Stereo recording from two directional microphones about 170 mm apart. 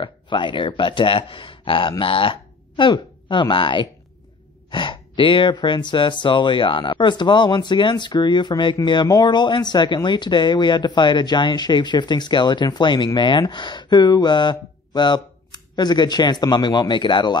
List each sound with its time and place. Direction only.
0.0 s speech: 30° left (ahead or behind)